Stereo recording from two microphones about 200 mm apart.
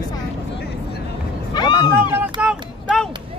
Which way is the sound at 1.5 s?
20° left (ahead or behind).